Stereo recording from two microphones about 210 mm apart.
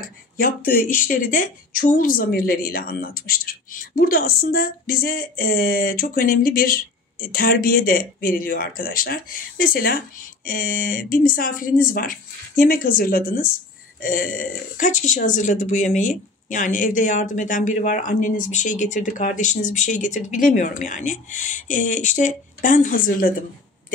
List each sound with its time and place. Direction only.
0.4 s a woman's voice: 40° left (ahead or behind)